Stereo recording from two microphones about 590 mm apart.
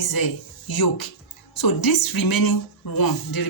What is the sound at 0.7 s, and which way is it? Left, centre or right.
Speech, left.